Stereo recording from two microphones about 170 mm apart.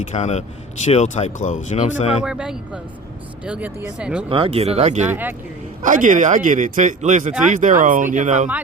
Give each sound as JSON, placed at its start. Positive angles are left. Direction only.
{"t": 0.1, "sound": "speech", "side_deg": 40}
{"t": 2.2, "sound": "speech", "side_deg": -5}
{"t": 4.3, "sound": "speech", "side_deg": -30}
{"t": 5.0, "sound": "speech", "side_deg": -10}
{"t": 5.8, "sound": "speech", "side_deg": -50}